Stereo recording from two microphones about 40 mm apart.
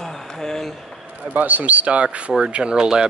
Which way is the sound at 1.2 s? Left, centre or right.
Right.